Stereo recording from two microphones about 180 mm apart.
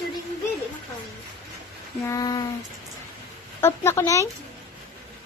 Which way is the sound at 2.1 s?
20° left (ahead or behind).